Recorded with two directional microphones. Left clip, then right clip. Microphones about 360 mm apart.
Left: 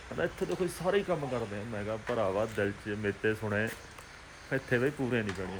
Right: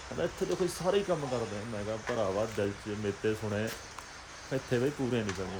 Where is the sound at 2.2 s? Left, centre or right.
Centre.